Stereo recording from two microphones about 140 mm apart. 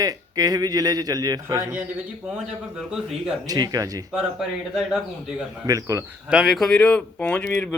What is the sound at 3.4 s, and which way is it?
Speech, 25° right (ahead or behind).